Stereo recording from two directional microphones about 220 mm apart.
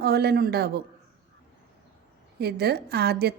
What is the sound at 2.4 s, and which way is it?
Speech, 45° right (ahead or behind).